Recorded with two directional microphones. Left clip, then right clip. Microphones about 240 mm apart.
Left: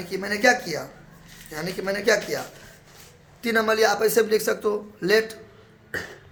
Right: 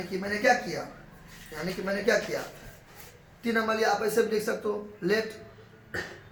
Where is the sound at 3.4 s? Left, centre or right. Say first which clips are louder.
Left 6 dB; left.